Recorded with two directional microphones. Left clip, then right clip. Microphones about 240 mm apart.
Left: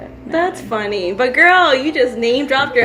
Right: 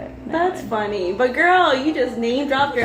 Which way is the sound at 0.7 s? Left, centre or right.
Left.